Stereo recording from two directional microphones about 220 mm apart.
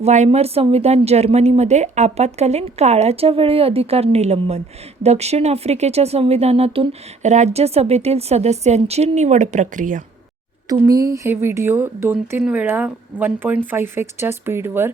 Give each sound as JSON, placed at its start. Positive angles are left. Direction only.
{"t": 0.0, "sound": "speech", "side_deg": -30}
{"t": 10.7, "sound": "speech", "side_deg": -15}